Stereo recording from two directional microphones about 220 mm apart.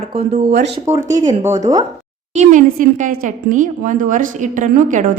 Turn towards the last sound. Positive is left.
turn(degrees=-35)  # may be behind; listen again after turning